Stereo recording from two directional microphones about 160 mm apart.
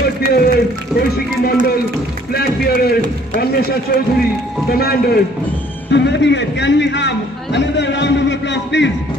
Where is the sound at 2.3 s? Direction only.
75° left (ahead or behind).